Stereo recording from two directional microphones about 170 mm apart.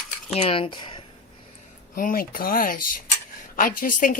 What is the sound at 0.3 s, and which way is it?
Speech, 35° left (ahead or behind).